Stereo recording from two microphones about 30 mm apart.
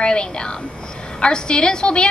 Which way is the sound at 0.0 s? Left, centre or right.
Left.